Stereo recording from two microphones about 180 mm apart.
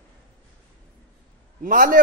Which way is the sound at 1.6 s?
50° right (ahead or behind).